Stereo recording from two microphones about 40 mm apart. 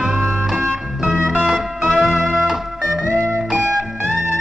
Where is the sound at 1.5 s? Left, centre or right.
Centre.